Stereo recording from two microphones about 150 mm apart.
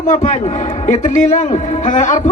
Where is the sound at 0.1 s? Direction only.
55° left (ahead or behind).